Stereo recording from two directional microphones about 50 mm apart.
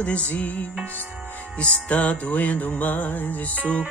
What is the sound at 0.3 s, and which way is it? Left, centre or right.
Music, left.